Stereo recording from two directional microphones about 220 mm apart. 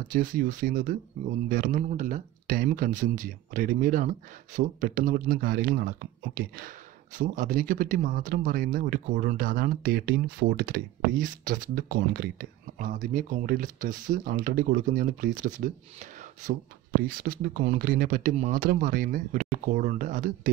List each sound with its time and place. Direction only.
0.1 s speech: 40° right (ahead or behind)
17.1 s speech: 40° right (ahead or behind)